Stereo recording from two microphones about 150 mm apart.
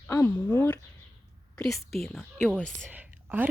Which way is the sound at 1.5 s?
Centre (ahead or behind).